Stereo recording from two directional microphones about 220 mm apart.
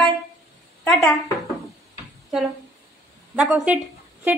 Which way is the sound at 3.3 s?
5° right (ahead or behind).